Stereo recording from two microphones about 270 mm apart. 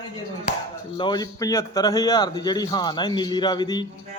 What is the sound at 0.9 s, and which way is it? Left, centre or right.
A man's voice, centre.